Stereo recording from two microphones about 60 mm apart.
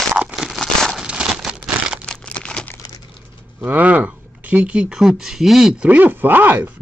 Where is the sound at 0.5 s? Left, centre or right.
Centre.